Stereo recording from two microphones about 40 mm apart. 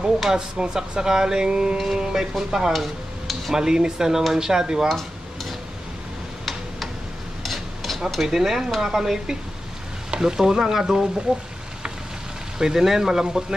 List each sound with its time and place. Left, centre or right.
0.2 s speech: centre
2.7 s stir: centre
3.5 s speech: centre
4.8 s dishes: centre
7.4 s stir: centre
8.1 s speech: centre
12.5 s speech: centre